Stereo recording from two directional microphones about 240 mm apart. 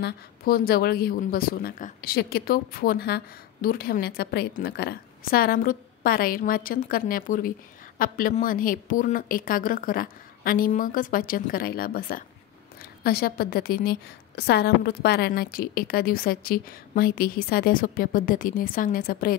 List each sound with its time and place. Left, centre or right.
0.0 s speech: left